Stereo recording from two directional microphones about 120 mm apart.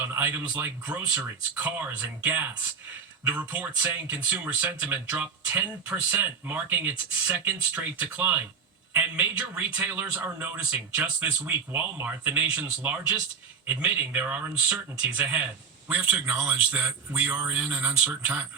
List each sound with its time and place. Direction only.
0.1 s speech: 20° right (ahead or behind)